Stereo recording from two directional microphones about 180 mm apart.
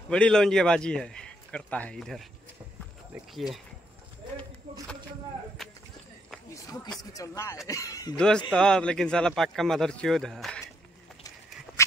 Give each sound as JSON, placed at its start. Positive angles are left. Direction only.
{"t": 0.1, "sound": "a man's voice", "side_deg": 5}
{"t": 3.3, "sound": "a man's voice", "side_deg": 0}
{"t": 5.6, "sound": "a sound", "side_deg": 0}
{"t": 6.5, "sound": "a sound", "side_deg": 20}
{"t": 7.2, "sound": "speech", "side_deg": 15}
{"t": 8.5, "sound": "a man's voice", "side_deg": 5}
{"t": 11.7, "sound": "horse", "side_deg": -5}